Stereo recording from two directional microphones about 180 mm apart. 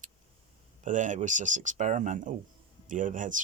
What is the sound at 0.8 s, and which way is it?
Speech, 45° right (ahead or behind).